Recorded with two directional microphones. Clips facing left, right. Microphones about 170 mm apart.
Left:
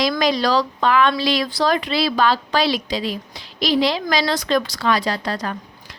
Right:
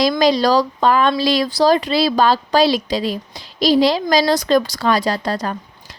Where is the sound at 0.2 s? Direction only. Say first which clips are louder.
Right 4 dB; 35° right (ahead or behind).